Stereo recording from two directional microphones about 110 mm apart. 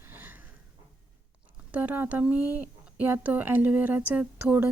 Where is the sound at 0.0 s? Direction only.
20° right (ahead or behind).